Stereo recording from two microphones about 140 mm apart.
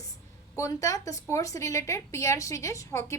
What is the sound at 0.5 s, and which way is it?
A woman's voice, 25° left (ahead or behind).